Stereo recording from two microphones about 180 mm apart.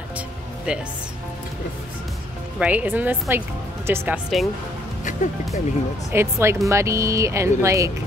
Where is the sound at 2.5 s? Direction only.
10° right (ahead or behind).